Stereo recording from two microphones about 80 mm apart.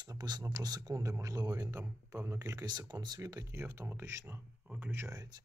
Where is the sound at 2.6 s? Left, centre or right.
Right.